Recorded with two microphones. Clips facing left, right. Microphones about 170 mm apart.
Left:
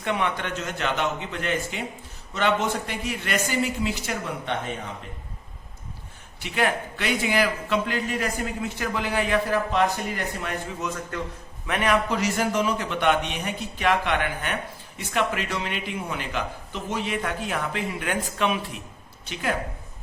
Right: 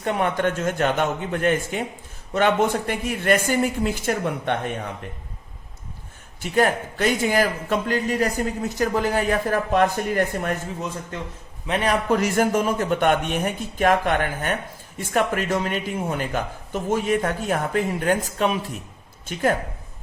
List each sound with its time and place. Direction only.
0.0 s speech: 40° right (ahead or behind)
6.4 s speech: 40° right (ahead or behind)
10.8 s a man's voice: 30° right (ahead or behind)
12.0 s speech: 50° right (ahead or behind)